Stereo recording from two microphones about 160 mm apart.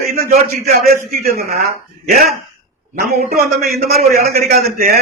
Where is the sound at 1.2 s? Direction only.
70° right (ahead or behind).